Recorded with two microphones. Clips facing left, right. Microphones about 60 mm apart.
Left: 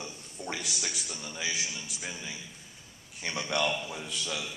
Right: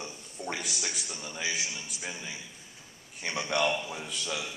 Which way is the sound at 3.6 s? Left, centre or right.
Centre.